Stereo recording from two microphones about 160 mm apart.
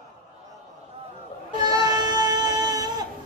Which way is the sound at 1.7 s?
25° right (ahead or behind).